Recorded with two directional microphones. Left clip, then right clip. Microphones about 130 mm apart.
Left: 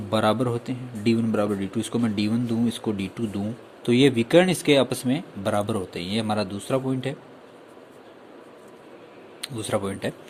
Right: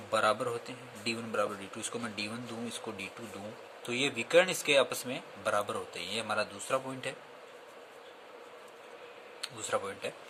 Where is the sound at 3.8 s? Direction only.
40° left (ahead or behind).